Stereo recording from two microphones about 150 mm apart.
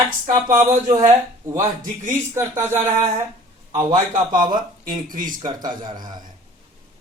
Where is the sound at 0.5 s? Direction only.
50° right (ahead or behind).